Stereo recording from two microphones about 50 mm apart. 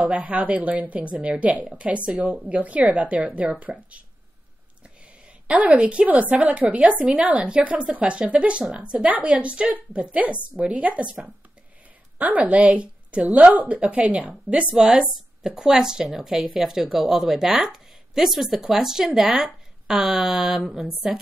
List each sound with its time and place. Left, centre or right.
0.0 s a woman's voice: right
5.5 s a woman's voice: right; by 21.2 s centre